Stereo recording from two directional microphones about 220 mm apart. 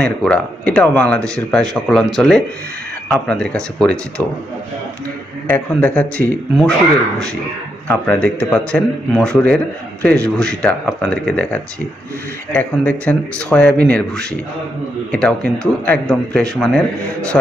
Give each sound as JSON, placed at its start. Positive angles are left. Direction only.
{"t": 0.0, "sound": "speech", "side_deg": 5}
{"t": 5.5, "sound": "speech", "side_deg": 5}
{"t": 7.9, "sound": "speech", "side_deg": 5}